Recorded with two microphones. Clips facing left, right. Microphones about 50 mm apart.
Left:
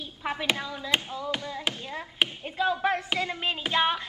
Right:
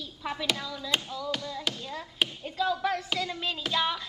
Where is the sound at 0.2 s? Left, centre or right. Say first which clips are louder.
Left 3 dB; left.